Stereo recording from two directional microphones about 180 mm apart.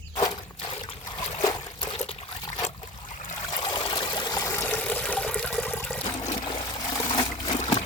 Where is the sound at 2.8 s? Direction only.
45° left (ahead or behind).